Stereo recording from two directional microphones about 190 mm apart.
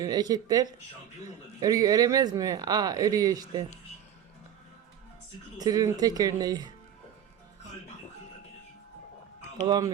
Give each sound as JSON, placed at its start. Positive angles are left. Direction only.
{"t": 0.0, "sound": "speech", "side_deg": -20}
{"t": 5.5, "sound": "speech", "side_deg": -20}
{"t": 9.6, "sound": "speech", "side_deg": -20}